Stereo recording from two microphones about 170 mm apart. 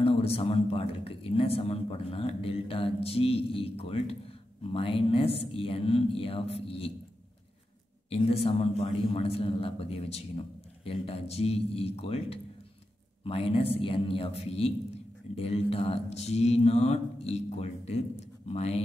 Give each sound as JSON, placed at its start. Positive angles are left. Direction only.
{"t": 0.0, "sound": "speech", "side_deg": 35}
{"t": 8.1, "sound": "speech", "side_deg": 35}